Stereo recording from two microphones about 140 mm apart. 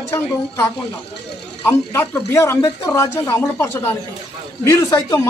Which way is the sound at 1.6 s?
20° left (ahead or behind).